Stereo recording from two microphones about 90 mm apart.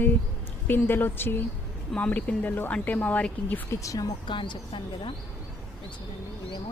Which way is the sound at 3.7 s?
35° left (ahead or behind).